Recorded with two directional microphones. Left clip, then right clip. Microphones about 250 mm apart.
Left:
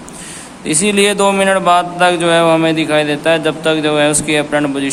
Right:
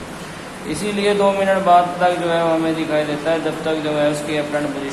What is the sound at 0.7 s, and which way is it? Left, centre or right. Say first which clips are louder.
Mantra: left 6 dB; left.